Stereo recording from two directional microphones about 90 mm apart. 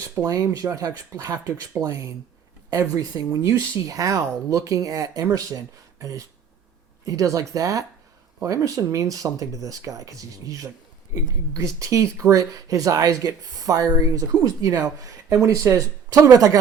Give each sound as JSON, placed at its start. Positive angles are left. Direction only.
{"t": 0.3, "sound": "speech", "side_deg": -40}